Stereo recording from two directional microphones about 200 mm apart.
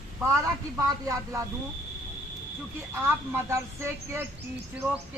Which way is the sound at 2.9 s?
10° right (ahead or behind).